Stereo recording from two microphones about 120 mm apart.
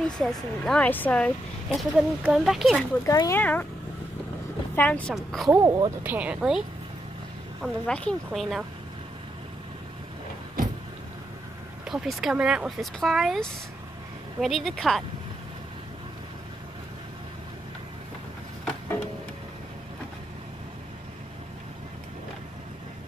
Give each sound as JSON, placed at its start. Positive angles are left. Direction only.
{"t": 0.2, "sound": "speech", "side_deg": 5}
{"t": 0.8, "sound": "speech", "side_deg": 15}
{"t": 1.8, "sound": "speech", "side_deg": -5}
{"t": 3.1, "sound": "speech", "side_deg": 30}
{"t": 3.3, "sound": "speech", "side_deg": 15}
{"t": 4.7, "sound": "speech", "side_deg": 10}
{"t": 5.1, "sound": "speech", "side_deg": 0}
{"t": 5.6, "sound": "speech", "side_deg": -25}
{"t": 6.0, "sound": "speech", "side_deg": -10}
{"t": 7.6, "sound": "speech", "side_deg": 10}
{"t": 11.9, "sound": "speech", "side_deg": -5}